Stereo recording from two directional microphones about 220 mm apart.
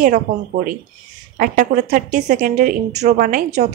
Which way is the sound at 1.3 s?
40° right (ahead or behind).